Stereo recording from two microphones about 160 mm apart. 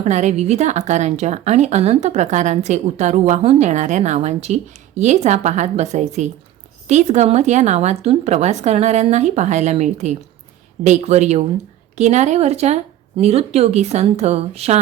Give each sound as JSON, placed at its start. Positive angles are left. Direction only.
{"t": 0.0, "sound": "speech", "side_deg": -45}